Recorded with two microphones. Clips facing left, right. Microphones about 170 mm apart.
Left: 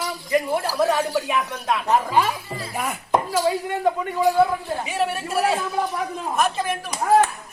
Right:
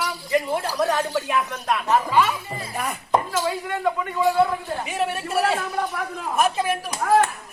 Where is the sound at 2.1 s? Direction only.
30° left (ahead or behind).